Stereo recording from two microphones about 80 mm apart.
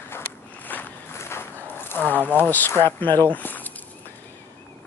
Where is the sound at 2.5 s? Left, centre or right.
Left.